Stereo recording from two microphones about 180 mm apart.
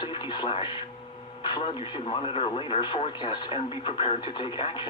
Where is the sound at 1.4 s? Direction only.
25° left (ahead or behind).